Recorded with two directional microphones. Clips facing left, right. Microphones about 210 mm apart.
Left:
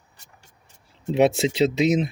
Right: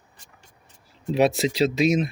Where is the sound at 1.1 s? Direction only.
25° left (ahead or behind).